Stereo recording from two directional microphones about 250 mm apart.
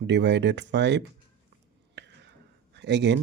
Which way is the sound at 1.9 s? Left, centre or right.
Right.